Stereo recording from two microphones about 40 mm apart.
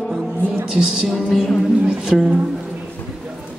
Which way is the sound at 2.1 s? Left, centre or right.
Centre.